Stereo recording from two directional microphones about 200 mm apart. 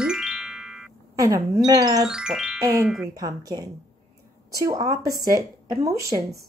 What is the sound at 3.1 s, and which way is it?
Speech, 15° right (ahead or behind).